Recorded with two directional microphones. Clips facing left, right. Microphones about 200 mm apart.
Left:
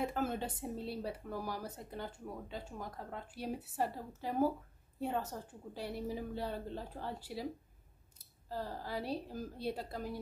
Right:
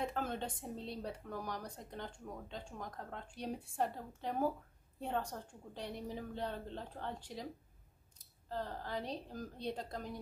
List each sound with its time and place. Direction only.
0.0 s a woman's voice: 5° left (ahead or behind)